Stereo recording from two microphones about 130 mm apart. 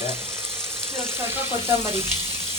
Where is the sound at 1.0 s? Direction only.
20° right (ahead or behind).